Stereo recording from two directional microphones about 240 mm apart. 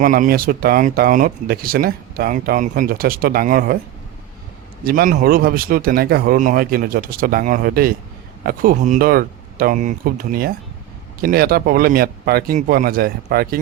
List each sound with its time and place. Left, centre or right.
0.0 s speech: right
4.9 s speech: right